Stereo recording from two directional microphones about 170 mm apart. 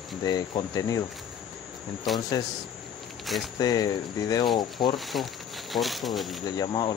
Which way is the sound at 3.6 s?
20° left (ahead or behind).